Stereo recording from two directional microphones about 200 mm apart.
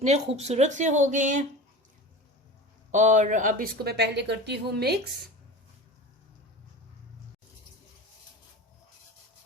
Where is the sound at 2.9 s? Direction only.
40° right (ahead or behind); by 5.0 s 55° right (ahead or behind).